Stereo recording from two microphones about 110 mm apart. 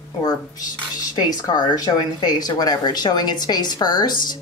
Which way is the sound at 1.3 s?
35° left (ahead or behind).